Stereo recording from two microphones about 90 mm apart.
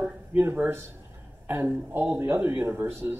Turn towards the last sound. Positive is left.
turn(degrees=-25)  # may be behind; listen again after turning